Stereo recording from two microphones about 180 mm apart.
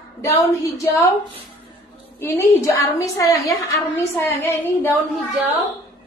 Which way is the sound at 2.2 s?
15° left (ahead or behind).